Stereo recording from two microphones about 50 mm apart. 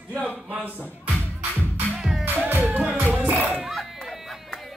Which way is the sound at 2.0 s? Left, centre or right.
Centre.